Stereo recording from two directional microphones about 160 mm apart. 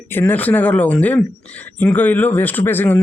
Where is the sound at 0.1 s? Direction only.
10° left (ahead or behind).